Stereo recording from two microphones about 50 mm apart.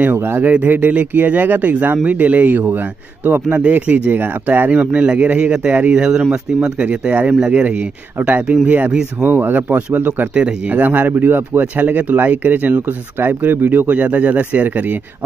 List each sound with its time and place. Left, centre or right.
0.0 s speech: right
3.4 s speech: right
4.1 s speech: right
4.7 s speech: right
9.2 s speech: right
10.3 s speech: right
11.7 s speech: right